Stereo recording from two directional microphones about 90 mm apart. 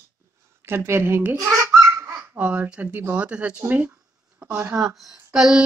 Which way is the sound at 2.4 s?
15° right (ahead or behind).